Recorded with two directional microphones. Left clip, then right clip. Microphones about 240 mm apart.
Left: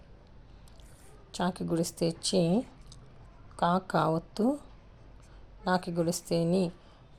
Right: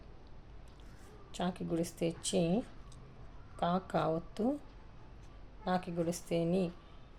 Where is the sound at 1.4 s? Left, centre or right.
Left.